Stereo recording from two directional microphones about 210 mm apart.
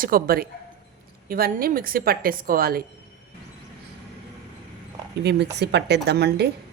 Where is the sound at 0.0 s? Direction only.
45° right (ahead or behind).